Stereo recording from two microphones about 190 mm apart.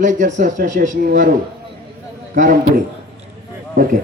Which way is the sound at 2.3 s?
50° right (ahead or behind).